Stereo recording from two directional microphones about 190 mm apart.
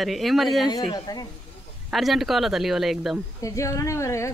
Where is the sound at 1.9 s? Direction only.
Centre (ahead or behind).